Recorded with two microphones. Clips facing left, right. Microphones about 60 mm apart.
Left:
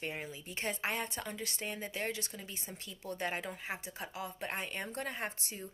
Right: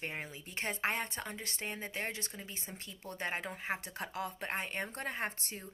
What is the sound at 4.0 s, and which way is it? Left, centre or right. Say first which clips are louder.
Speech: right 3 dB; right.